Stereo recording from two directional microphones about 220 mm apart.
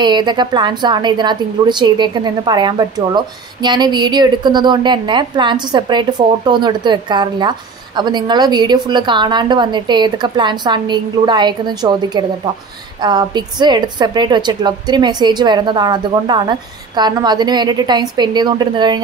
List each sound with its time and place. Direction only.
0.0 s a woman's voice: 20° right (ahead or behind)